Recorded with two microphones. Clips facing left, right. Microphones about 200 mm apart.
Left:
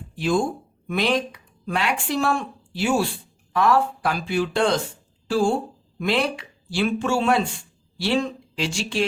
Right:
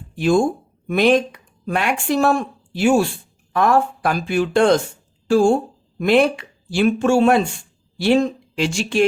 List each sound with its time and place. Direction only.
0.2 s speech: 45° right (ahead or behind)